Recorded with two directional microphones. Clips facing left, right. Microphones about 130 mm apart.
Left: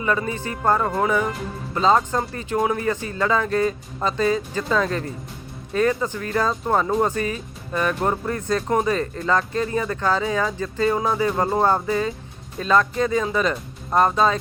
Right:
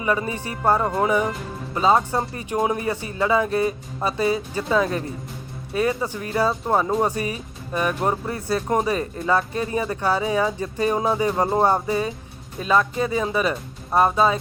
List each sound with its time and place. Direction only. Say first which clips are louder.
0.0 s speech: even; 20° right (ahead or behind)